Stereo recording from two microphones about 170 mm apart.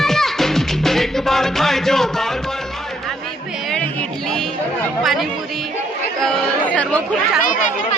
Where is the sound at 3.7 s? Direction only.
5° left (ahead or behind).